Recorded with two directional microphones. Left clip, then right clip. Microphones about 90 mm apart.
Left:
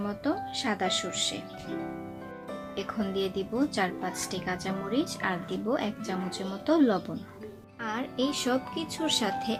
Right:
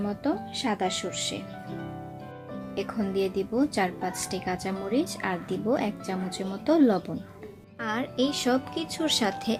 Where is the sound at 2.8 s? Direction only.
35° right (ahead or behind).